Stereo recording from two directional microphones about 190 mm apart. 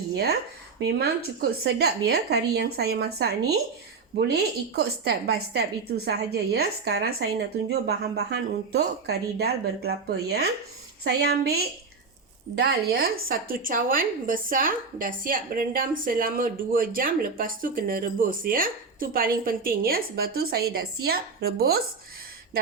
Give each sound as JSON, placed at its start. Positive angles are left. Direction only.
{"t": 0.9, "sound": "speech", "side_deg": -60}